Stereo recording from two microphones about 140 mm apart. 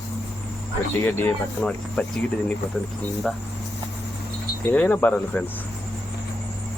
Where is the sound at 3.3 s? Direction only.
Centre (ahead or behind).